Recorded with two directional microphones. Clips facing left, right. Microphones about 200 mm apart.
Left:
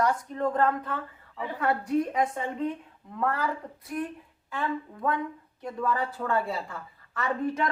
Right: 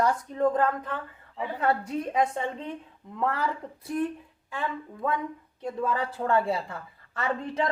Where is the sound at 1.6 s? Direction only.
25° right (ahead or behind).